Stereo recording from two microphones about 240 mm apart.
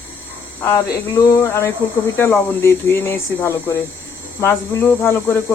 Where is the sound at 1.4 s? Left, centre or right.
Centre.